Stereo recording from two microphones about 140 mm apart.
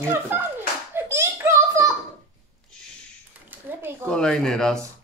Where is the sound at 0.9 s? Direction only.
20° right (ahead or behind).